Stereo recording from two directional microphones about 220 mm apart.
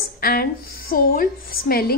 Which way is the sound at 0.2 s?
45° left (ahead or behind).